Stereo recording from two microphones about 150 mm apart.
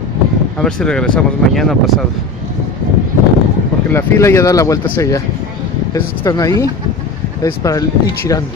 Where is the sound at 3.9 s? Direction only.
15° left (ahead or behind).